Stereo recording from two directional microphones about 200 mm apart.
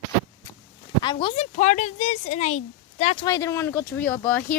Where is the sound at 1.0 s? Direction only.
25° left (ahead or behind).